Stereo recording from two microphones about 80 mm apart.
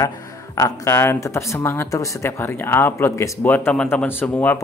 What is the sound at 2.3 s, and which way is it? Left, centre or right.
Speech, left.